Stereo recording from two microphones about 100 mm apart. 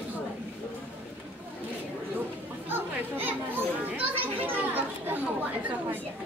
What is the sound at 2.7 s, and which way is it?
Children playing, 20° right (ahead or behind).